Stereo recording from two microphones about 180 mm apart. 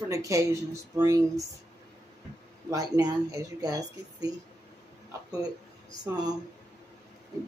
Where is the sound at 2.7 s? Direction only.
20° right (ahead or behind).